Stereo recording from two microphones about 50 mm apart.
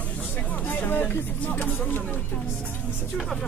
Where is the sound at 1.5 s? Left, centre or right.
Left.